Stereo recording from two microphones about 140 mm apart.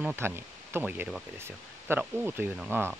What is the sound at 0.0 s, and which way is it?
Speech, 15° right (ahead or behind).